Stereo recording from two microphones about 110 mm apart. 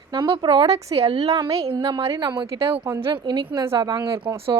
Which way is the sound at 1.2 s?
40° right (ahead or behind).